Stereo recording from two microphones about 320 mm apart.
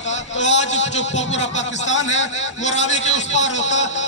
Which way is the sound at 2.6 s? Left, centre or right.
Left.